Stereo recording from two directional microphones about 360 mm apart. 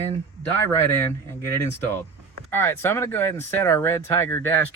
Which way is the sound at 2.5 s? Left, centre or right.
Centre.